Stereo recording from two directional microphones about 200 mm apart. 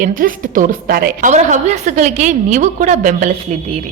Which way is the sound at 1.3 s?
35° right (ahead or behind).